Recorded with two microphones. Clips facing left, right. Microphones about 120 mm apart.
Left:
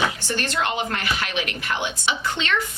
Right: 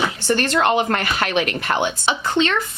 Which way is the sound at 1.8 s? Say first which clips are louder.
Right 4 dB; 35° right (ahead or behind).